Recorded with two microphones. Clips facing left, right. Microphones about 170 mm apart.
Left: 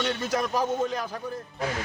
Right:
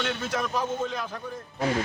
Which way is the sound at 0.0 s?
35° left (ahead or behind).